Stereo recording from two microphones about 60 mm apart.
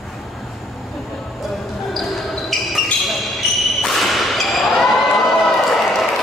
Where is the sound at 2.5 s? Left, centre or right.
Centre.